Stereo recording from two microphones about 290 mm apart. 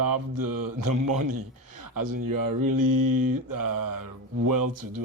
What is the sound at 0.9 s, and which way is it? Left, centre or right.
A man's voice, right.